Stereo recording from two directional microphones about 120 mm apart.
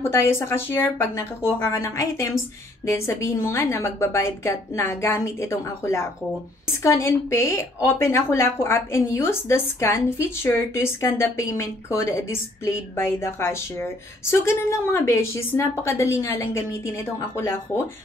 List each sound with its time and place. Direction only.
0.0 s a woman's voice: 20° left (ahead or behind)